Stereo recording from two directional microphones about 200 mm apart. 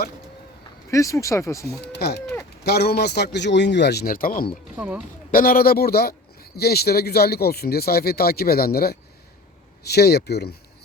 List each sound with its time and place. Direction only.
0.9 s speech: 15° left (ahead or behind)
1.8 s a man's voice: 55° left (ahead or behind)
4.8 s speech: 5° right (ahead or behind)
5.3 s speech: 45° left (ahead or behind)